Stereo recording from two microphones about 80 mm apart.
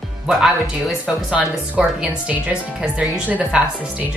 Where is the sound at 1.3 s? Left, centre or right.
Centre.